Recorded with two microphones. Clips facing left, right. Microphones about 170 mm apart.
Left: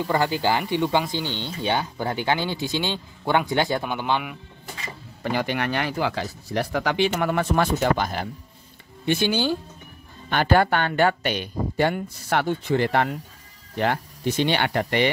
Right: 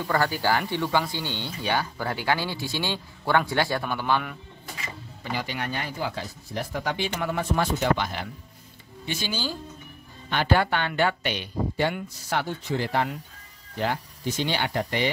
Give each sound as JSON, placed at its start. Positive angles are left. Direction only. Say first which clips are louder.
{"t": 0.0, "sound": "speech", "louder": "left 3 dB", "side_deg": 20}
{"t": 5.2, "sound": "speech", "louder": "left 6 dB", "side_deg": 55}
{"t": 8.0, "sound": "speech", "louder": "left 4 dB", "side_deg": 45}
{"t": 9.0, "sound": "speech", "louder": "left 9 dB", "side_deg": 60}
{"t": 10.3, "sound": "speech", "louder": "left 4 dB", "side_deg": 50}